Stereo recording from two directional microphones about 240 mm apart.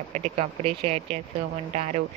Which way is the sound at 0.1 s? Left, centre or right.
Right.